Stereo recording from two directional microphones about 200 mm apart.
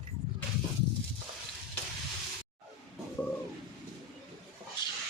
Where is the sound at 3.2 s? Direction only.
10° left (ahead or behind).